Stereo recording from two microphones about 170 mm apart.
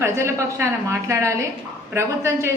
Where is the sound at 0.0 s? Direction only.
15° right (ahead or behind).